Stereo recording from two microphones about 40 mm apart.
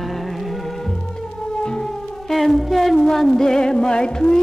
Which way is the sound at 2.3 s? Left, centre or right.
Centre.